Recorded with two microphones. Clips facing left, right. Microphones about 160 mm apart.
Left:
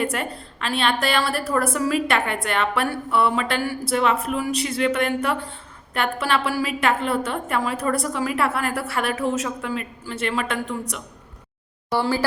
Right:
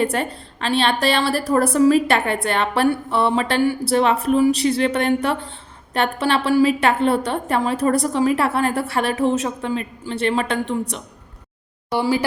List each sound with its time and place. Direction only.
0.0 s a woman's voice: 30° right (ahead or behind)
11.9 s speech: 15° right (ahead or behind)